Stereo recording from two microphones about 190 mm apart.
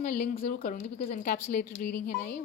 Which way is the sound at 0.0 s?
55° left (ahead or behind).